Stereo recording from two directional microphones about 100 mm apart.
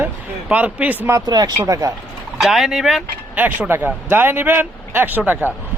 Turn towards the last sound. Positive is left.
turn(degrees=-20)  # may be behind; listen again after turning